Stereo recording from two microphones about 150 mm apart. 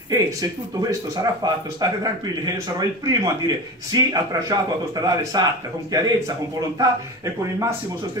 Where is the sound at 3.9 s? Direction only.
25° right (ahead or behind).